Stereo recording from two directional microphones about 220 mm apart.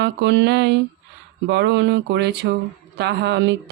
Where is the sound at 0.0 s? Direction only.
55° right (ahead or behind).